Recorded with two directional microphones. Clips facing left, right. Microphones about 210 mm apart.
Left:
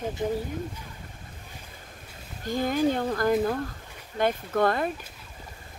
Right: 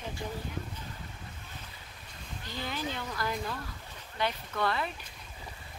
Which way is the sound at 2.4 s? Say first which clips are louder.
Left 13 dB; 45° left (ahead or behind).